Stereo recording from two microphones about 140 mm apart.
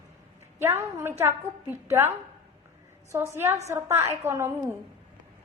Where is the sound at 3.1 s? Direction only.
20° right (ahead or behind).